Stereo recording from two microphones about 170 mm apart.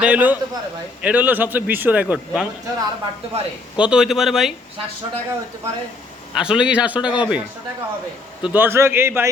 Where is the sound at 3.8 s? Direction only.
5° right (ahead or behind).